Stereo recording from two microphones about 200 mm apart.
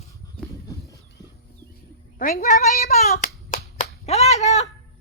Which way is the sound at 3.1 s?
40° left (ahead or behind).